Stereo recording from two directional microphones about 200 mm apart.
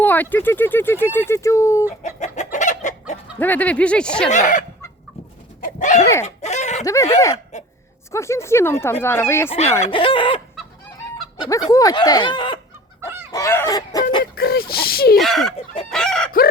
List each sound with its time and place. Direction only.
0.0 s speech: 10° left (ahead or behind)
2.0 s chicken: 35° left (ahead or behind)
3.3 s speech: 10° left (ahead or behind)
4.3 s speech: 40° left (ahead or behind)
5.5 s horse: 40° left (ahead or behind)
6.2 s chicken: 35° left (ahead or behind)
6.8 s speech: 15° left (ahead or behind)
9.8 s speech: 25° left (ahead or behind)
13.3 s chicken: 15° left (ahead or behind)
14.3 s speech: 50° left (ahead or behind)
15.2 s chicken: centre (ahead or behind)